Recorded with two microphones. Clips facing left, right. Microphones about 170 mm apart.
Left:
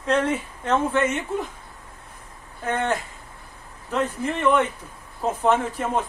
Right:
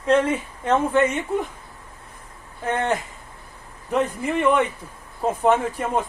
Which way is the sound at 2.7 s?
15° right (ahead or behind).